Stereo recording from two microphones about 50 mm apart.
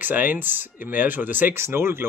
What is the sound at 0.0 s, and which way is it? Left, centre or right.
Speech, right.